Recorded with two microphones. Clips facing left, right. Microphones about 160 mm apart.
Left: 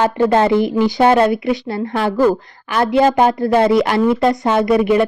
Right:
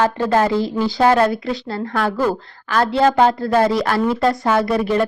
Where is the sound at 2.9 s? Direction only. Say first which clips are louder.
Left 2 dB; 15° left (ahead or behind).